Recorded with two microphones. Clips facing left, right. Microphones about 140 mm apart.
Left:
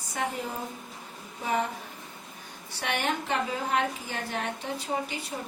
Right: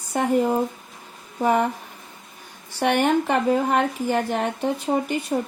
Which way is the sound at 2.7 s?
60° right (ahead or behind).